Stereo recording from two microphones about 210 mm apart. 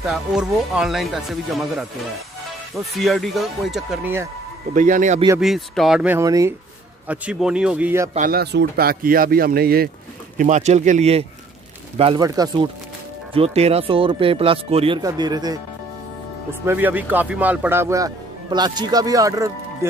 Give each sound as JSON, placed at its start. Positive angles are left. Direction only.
{"t": 0.0, "sound": "speech", "side_deg": -5}
{"t": 4.7, "sound": "speech", "side_deg": -35}
{"t": 5.4, "sound": "speech", "side_deg": 0}
{"t": 7.1, "sound": "speech", "side_deg": -5}
{"t": 8.1, "sound": "speech", "side_deg": -40}
{"t": 10.3, "sound": "speech", "side_deg": -35}
{"t": 13.3, "sound": "speech", "side_deg": -30}
{"t": 16.6, "sound": "speech", "side_deg": -10}